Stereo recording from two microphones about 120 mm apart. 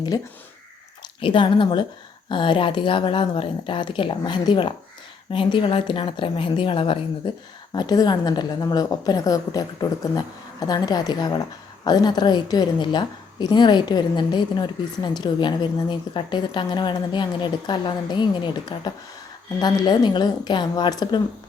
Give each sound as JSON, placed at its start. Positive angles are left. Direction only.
{"t": 1.2, "sound": "a woman's voice", "side_deg": 45}
{"t": 7.7, "sound": "a woman's voice", "side_deg": 35}